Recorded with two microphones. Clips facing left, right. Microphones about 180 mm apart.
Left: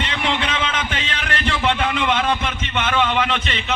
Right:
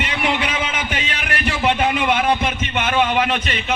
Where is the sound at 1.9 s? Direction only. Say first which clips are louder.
Right 2 dB; 10° right (ahead or behind).